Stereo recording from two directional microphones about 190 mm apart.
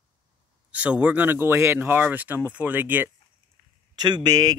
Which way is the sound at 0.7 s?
5° right (ahead or behind).